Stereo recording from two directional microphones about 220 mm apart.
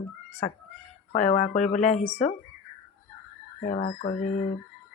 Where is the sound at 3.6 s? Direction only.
35° left (ahead or behind).